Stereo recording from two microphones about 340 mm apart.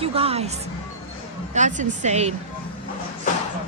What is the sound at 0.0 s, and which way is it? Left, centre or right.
Speech, centre.